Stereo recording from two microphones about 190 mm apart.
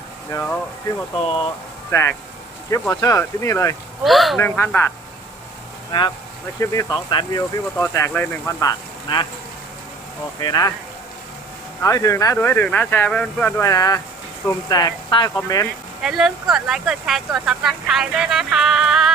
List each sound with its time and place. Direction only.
0.3 s speech: 15° left (ahead or behind)
1.2 s speech: 30° left (ahead or behind)
1.9 s speech: 15° left (ahead or behind)
4.0 s speech: centre (ahead or behind)
4.4 s speech: 10° left (ahead or behind)
5.9 s speech: 25° left (ahead or behind)
9.1 s speech: 25° left (ahead or behind)
10.4 s speech: 20° left (ahead or behind)
11.8 s speech: 15° left (ahead or behind)
16.0 s speech: 5° right (ahead or behind)